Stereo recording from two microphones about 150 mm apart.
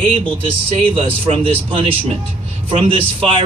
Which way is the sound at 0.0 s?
40° right (ahead or behind).